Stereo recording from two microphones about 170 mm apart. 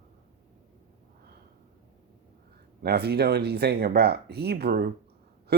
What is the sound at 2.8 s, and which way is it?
Speech, 70° right (ahead or behind).